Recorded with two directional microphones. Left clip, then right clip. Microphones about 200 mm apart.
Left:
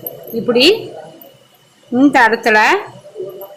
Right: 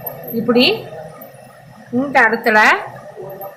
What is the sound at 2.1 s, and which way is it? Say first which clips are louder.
Speech: left 1 dB; 40° left (ahead or behind).